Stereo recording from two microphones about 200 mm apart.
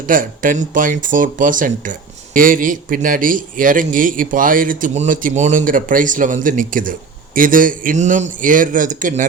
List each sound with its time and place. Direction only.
0.1 s a man's voice: 45° right (ahead or behind)